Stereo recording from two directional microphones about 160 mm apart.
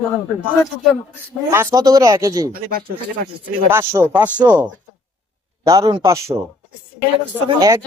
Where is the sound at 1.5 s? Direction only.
20° right (ahead or behind).